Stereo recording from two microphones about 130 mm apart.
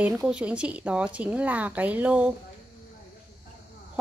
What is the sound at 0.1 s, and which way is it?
A woman's voice, 10° right (ahead or behind).